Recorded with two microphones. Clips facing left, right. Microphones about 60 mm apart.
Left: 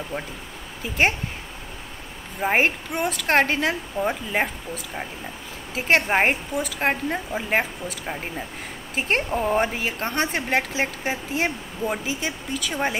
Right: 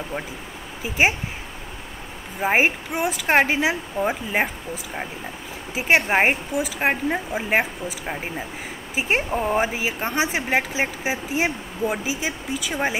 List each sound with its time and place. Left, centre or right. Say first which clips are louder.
0.8 s a woman's voice: right 1 dB; centre
2.4 s a woman's voice: right 1 dB; centre
5.8 s a woman's voice: right 1 dB; centre